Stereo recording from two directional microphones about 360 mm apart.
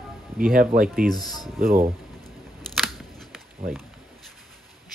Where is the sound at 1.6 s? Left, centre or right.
Right.